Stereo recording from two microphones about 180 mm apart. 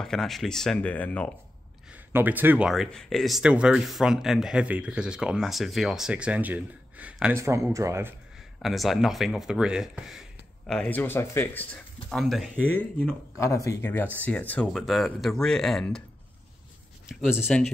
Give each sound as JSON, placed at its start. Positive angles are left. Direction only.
{"t": 0.0, "sound": "speech", "side_deg": 0}
{"t": 1.9, "sound": "speech", "side_deg": -10}
{"t": 8.6, "sound": "speech", "side_deg": 0}
{"t": 12.9, "sound": "speech", "side_deg": 15}
{"t": 17.1, "sound": "speech", "side_deg": -5}